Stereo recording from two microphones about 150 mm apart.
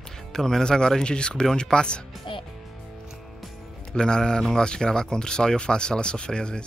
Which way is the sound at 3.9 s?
5° left (ahead or behind).